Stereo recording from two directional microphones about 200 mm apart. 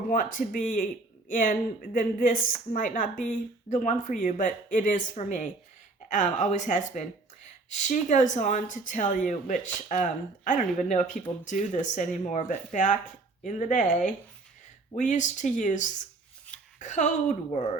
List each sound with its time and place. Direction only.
0.1 s speech: 40° left (ahead or behind)